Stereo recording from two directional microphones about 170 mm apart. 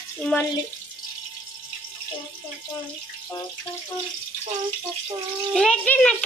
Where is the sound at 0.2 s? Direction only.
5° left (ahead or behind).